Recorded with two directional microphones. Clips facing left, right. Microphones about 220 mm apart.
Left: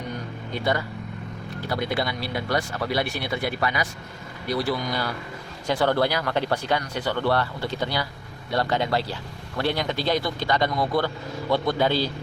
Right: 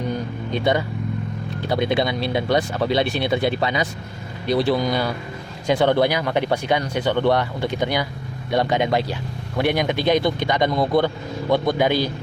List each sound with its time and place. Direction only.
0.5 s speech: 20° right (ahead or behind)